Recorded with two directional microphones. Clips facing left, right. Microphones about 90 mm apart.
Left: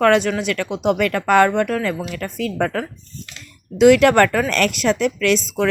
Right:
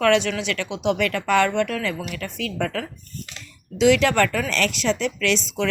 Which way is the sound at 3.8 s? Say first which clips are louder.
Left 6 dB; 50° left (ahead or behind).